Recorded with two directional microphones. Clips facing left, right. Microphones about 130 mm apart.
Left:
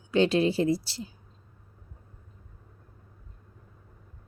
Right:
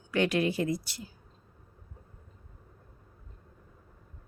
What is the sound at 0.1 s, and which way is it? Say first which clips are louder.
Speech: left 4 dB; 25° left (ahead or behind).